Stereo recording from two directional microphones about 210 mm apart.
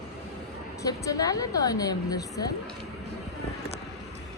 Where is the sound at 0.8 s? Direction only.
15° left (ahead or behind).